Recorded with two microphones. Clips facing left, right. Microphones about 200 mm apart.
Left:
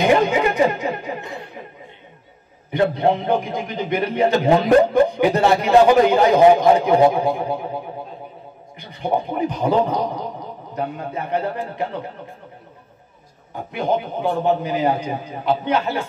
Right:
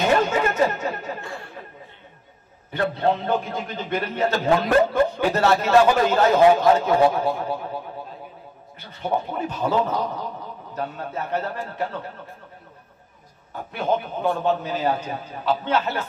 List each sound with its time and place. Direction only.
0.0 s chatter: 15° left (ahead or behind)
2.7 s a man's voice: 15° left (ahead or behind)
13.7 s a man's voice: 15° left (ahead or behind)